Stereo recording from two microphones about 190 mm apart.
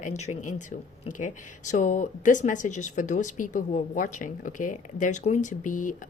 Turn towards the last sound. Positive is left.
turn(degrees=45)  # may be behind; listen again after turning